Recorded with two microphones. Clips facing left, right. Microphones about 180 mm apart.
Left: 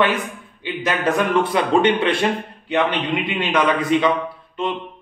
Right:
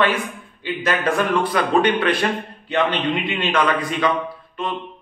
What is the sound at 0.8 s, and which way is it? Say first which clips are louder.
A man's voice: left 1 dB; 20° left (ahead or behind).